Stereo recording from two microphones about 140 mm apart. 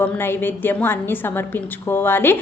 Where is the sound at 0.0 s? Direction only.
15° left (ahead or behind).